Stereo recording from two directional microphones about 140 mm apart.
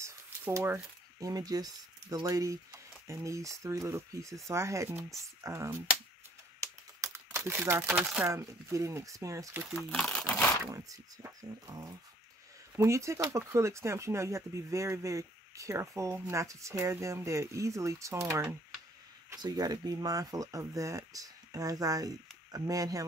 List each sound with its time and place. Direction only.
0.0 s a sound: 20° right (ahead or behind)
1.2 s speech: 25° right (ahead or behind)
6.6 s typing: 20° right (ahead or behind)
8.3 s speech: 20° right (ahead or behind)
9.9 s speech: 5° left (ahead or behind)
10.6 s speech: 25° right (ahead or behind)